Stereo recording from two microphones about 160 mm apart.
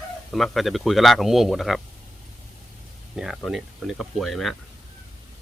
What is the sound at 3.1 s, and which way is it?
Speech, 5° right (ahead or behind).